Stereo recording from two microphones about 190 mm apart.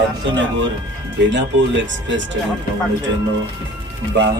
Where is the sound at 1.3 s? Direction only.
70° right (ahead or behind).